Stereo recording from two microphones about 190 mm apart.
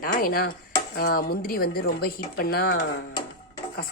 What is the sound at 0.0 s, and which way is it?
A woman's voice, 50° left (ahead or behind).